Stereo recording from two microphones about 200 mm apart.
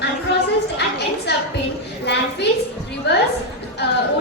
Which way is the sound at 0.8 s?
55° left (ahead or behind).